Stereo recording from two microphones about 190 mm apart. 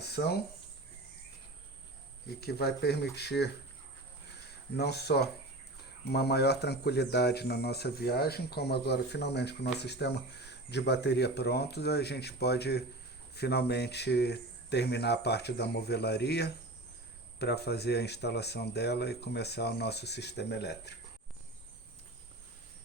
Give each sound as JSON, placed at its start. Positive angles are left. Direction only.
{"t": 0.0, "sound": "a sound", "side_deg": 60}
{"t": 2.4, "sound": "speech", "side_deg": 55}
{"t": 4.8, "sound": "speech", "side_deg": 60}